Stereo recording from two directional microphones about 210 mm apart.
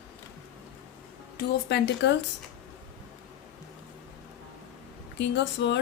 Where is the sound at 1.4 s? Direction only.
55° left (ahead or behind).